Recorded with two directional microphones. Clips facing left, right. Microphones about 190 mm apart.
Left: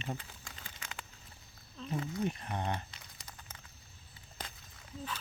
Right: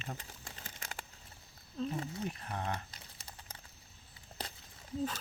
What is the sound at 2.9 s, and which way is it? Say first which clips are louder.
Crumpling: even; 35° right (ahead or behind).